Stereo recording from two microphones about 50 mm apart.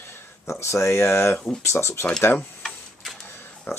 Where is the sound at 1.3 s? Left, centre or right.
Centre.